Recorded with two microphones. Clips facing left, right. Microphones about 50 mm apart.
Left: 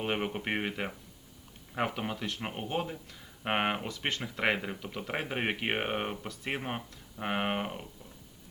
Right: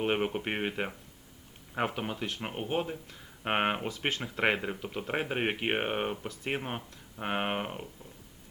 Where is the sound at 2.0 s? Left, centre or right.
Centre.